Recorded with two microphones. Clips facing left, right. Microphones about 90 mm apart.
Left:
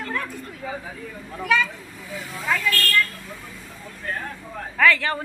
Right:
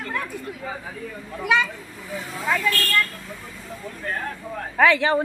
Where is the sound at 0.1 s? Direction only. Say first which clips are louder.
Right 1 dB; 15° right (ahead or behind).